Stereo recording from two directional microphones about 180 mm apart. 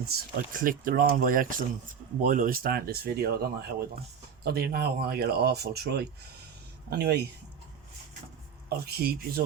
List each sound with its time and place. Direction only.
0.1 s speech: 55° right (ahead or behind)
8.8 s speech: 60° right (ahead or behind)